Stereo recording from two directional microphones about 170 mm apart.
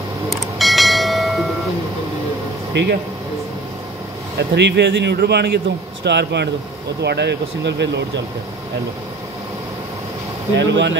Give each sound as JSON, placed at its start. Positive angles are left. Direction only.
{"t": 0.3, "sound": "bell", "side_deg": 0}
{"t": 2.8, "sound": "speech", "side_deg": -90}
{"t": 4.4, "sound": "speech", "side_deg": -90}
{"t": 6.0, "sound": "speech", "side_deg": -90}
{"t": 10.5, "sound": "speech", "side_deg": -90}